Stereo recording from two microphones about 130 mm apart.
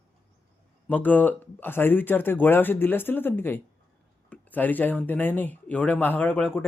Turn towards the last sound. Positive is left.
turn(degrees=10)  # may be behind; listen again after turning